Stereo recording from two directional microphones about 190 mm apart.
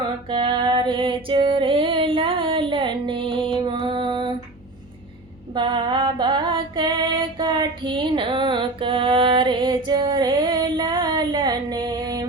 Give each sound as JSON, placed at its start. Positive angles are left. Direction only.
{"t": 0.3, "sound": "female singing", "side_deg": -25}
{"t": 5.5, "sound": "music", "side_deg": -25}